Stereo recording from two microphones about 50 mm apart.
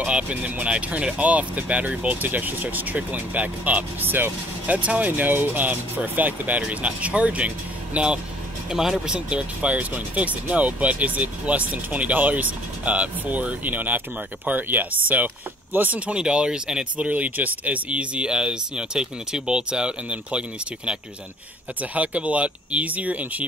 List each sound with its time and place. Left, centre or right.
0.0 s speech: right
4.7 s speech: right
8.6 s speech: centre; by 16.0 s right
16.1 s speech: centre
17.1 s speech: right